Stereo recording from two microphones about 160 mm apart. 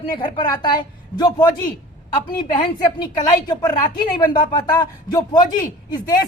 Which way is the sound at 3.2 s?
25° left (ahead or behind).